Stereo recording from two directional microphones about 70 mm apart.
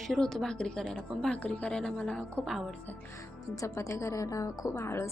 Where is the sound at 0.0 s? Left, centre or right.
Centre.